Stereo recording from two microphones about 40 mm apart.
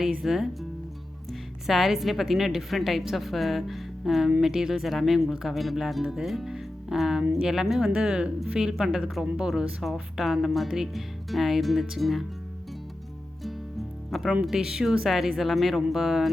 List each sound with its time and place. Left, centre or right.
0.2 s speech: centre
6.2 s music: centre
7.4 s speech: centre
7.9 s speech: right
9.8 s speech: centre
14.1 s speech: centre